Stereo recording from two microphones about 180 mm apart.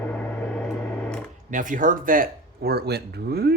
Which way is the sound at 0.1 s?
10° left (ahead or behind).